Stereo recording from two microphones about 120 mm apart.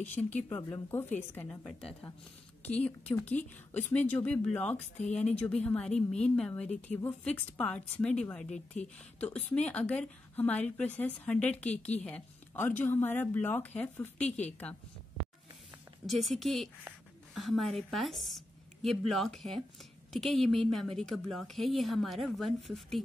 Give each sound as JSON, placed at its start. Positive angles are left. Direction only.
{"t": 0.0, "sound": "a woman's voice", "side_deg": 15}
{"t": 16.1, "sound": "a woman's voice", "side_deg": 0}